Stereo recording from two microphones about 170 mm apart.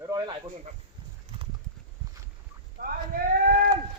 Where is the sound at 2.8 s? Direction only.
70° right (ahead or behind).